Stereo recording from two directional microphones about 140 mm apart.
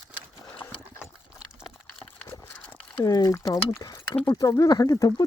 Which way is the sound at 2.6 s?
10° left (ahead or behind).